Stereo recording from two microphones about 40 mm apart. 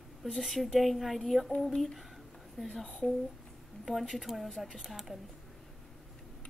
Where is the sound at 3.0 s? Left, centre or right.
Left.